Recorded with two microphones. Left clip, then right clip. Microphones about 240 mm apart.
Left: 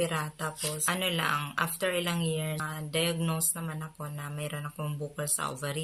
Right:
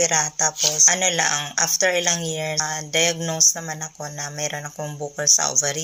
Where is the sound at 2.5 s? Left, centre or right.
Centre.